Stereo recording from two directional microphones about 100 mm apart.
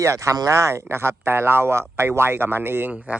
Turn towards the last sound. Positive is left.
turn(degrees=-10)  # may be behind; listen again after turning